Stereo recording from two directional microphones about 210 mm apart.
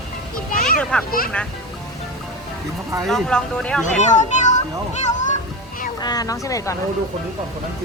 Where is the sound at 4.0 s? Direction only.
35° left (ahead or behind).